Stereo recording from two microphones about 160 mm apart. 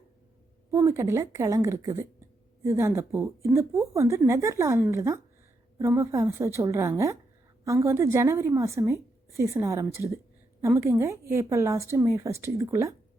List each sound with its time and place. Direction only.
0.7 s a woman's voice: 15° right (ahead or behind)